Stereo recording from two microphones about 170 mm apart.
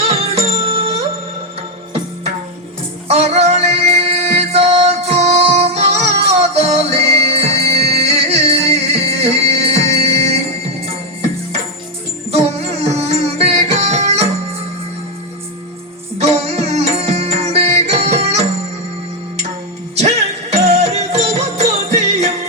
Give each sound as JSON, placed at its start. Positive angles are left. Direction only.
{"t": 0.0, "sound": "music", "side_deg": -35}
{"t": 3.1, "sound": "music", "side_deg": -40}
{"t": 16.2, "sound": "music", "side_deg": -40}
{"t": 20.0, "sound": "music", "side_deg": -40}